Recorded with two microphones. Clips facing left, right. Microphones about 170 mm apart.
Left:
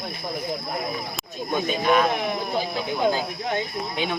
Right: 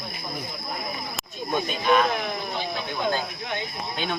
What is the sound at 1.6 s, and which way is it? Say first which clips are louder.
Speech: left 1 dB; 5° left (ahead or behind).